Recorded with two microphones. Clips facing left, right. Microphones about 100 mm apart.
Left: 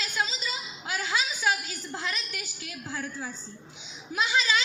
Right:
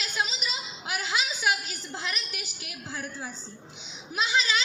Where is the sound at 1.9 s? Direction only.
20° right (ahead or behind).